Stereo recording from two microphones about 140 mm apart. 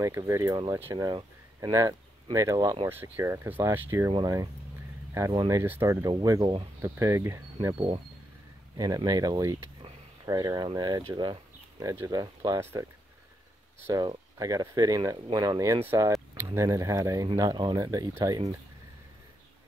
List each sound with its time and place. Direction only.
0.3 s speech: 25° right (ahead or behind)
1.0 s speech: 25° right (ahead or behind)
2.9 s speech: 15° right (ahead or behind)
7.7 s speech: 40° right (ahead or behind)
8.7 s speech: 25° right (ahead or behind)
11.8 s speech: 20° right (ahead or behind)
13.8 s speech: 25° right (ahead or behind)